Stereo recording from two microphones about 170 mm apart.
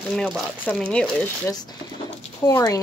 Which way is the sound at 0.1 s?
5° left (ahead or behind).